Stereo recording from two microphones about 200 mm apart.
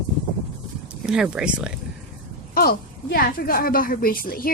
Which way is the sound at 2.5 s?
50° left (ahead or behind).